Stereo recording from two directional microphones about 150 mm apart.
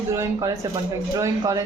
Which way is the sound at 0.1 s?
20° right (ahead or behind).